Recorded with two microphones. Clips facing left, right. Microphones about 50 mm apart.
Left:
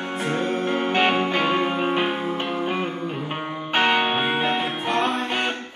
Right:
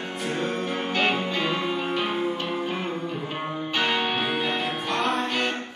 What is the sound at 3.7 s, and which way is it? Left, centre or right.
Music, left.